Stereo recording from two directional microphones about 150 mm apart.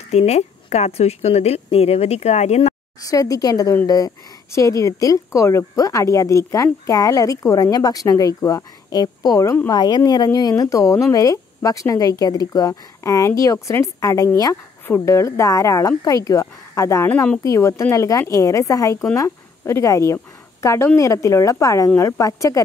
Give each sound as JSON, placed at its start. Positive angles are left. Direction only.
{"t": 0.1, "sound": "a woman's voice", "side_deg": 45}
{"t": 3.1, "sound": "a woman's voice", "side_deg": 25}